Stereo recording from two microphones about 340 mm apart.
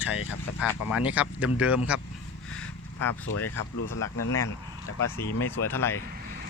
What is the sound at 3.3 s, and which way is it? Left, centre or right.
Speech, left.